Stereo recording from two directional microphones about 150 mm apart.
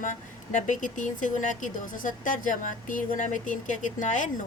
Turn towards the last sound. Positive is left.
turn(degrees=60)  # may be behind; listen again after turning